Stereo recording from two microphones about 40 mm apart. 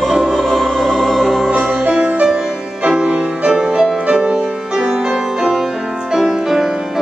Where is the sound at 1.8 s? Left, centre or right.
Right; by 3.9 s centre.